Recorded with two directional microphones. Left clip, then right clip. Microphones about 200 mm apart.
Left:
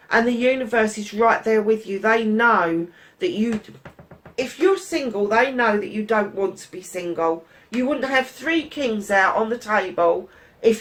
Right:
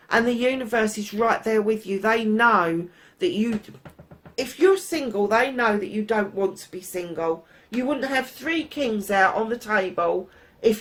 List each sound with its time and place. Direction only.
0.1 s a woman's voice: 50° right (ahead or behind)